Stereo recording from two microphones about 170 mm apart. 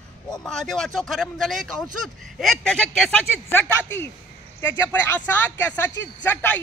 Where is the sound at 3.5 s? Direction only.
10° left (ahead or behind).